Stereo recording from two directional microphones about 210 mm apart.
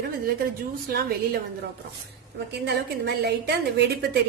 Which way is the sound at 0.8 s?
50° right (ahead or behind).